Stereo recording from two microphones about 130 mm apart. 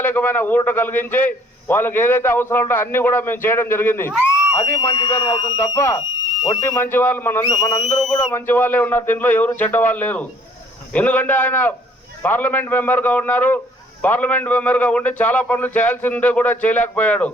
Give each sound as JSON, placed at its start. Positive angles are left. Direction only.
{"t": 0.0, "sound": "a man's voice", "side_deg": 15}
{"t": 7.4, "sound": "speech", "side_deg": 30}
{"t": 7.9, "sound": "whistle", "side_deg": 5}
{"t": 8.3, "sound": "a man's voice", "side_deg": 15}